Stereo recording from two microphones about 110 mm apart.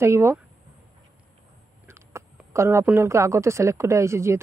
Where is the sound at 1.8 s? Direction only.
25° right (ahead or behind).